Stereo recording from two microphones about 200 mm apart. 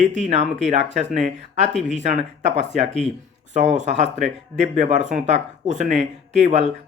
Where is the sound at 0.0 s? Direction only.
35° right (ahead or behind).